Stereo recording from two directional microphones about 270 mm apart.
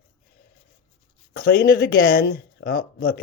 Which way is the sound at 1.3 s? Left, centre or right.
Left.